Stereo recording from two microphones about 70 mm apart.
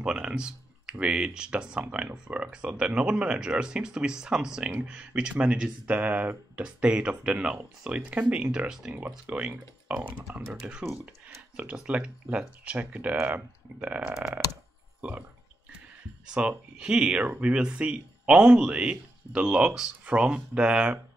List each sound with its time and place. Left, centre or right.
0.0 s speech: centre
16.3 s speech: centre